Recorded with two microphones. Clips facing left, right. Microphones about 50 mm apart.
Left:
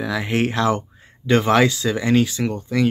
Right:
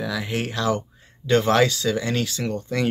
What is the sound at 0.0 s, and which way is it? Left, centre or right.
Speech, left.